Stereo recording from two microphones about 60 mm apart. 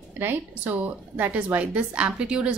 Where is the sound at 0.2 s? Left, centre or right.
Right.